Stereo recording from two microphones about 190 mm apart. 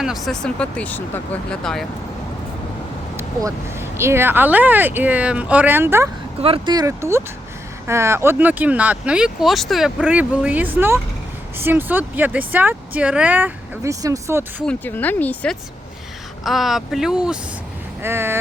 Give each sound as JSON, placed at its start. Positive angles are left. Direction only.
{"t": 0.0, "sound": "speech", "side_deg": 0}
{"t": 3.2, "sound": "speech", "side_deg": -15}
{"t": 6.4, "sound": "speech", "side_deg": -25}
{"t": 14.6, "sound": "speech", "side_deg": 10}